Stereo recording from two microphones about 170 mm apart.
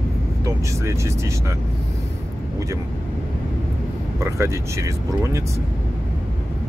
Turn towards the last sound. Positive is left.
turn(degrees=-15)  # may be behind; listen again after turning